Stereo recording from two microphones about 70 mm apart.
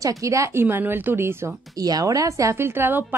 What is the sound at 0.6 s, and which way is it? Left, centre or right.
Speech, right.